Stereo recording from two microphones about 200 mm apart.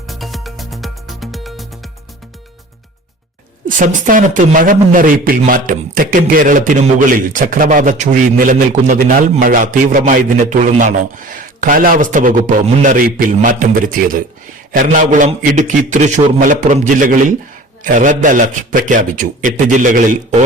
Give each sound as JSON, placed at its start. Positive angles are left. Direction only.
{"t": 0.1, "sound": "music", "side_deg": 0}
{"t": 3.8, "sound": "a man's voice", "side_deg": -40}